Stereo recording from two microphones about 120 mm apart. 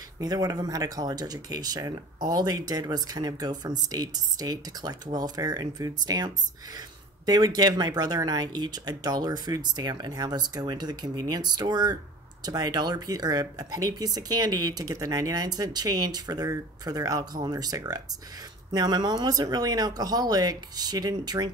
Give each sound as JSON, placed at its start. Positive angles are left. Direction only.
{"t": 0.2, "sound": "speech", "side_deg": -30}